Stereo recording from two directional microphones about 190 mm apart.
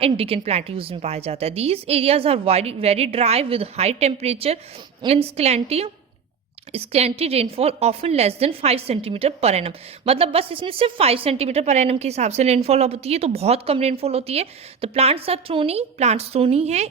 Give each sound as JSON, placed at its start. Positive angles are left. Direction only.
{"t": 0.0, "sound": "a woman's voice", "side_deg": -30}